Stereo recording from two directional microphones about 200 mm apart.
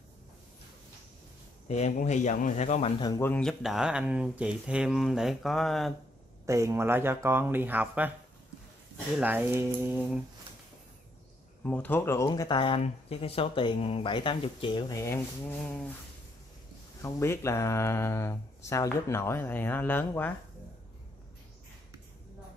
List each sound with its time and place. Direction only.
1.7 s speech: 35° left (ahead or behind)
3.0 s speech: 15° left (ahead or behind)
6.4 s speech: 15° right (ahead or behind)
9.2 s speech: 10° right (ahead or behind)
11.6 s speech: 5° left (ahead or behind)
17.0 s speech: 15° left (ahead or behind)